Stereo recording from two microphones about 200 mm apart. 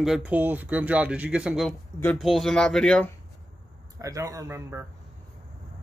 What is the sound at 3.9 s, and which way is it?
Speech, 15° right (ahead or behind).